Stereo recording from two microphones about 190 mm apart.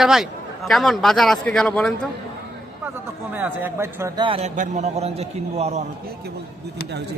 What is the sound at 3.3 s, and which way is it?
Speech, 10° right (ahead or behind).